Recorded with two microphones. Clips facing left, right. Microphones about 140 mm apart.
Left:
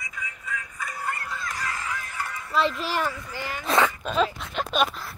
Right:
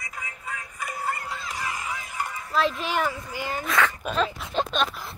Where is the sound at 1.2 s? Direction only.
20° right (ahead or behind).